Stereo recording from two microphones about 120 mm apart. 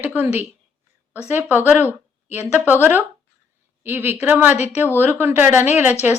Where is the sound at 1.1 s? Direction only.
15° right (ahead or behind).